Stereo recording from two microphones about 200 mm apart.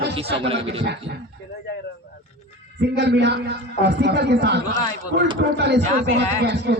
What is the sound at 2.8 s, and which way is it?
A man's voice, 60° right (ahead or behind).